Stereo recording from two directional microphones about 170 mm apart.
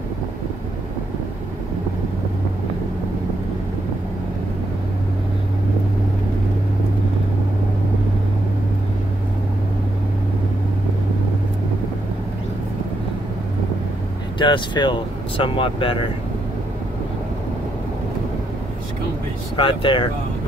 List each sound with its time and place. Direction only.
14.4 s speech: 30° left (ahead or behind)
19.5 s speech: 30° left (ahead or behind)